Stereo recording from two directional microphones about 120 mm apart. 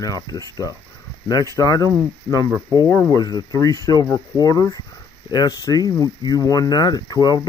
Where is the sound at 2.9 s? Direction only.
20° left (ahead or behind).